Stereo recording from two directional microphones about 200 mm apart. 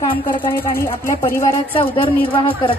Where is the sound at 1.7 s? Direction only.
25° left (ahead or behind).